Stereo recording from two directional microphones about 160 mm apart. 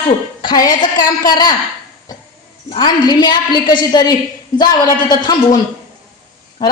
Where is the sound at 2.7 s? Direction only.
30° left (ahead or behind).